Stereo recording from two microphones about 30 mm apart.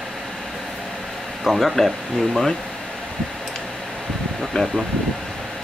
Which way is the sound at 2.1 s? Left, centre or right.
Centre.